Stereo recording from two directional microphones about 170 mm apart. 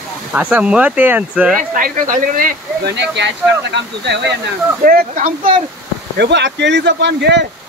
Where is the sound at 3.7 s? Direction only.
90° right.